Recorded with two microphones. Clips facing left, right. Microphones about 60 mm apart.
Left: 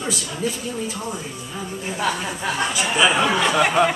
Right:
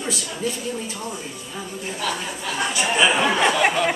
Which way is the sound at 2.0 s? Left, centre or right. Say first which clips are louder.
Left 4 dB; left.